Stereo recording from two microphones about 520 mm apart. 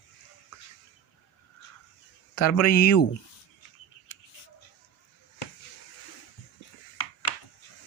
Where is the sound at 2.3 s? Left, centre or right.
Left.